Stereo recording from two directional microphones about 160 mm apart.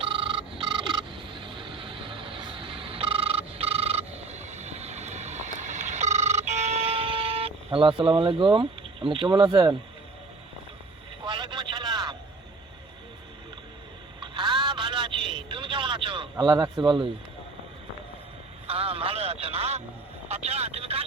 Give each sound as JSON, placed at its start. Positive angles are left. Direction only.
{"t": 0.0, "sound": "a sound", "side_deg": -35}
{"t": 11.3, "sound": "vehicle", "side_deg": -30}
{"t": 14.2, "sound": "vehicle", "side_deg": -30}
{"t": 18.7, "sound": "radio", "side_deg": -35}
{"t": 20.2, "sound": "vehicle", "side_deg": -40}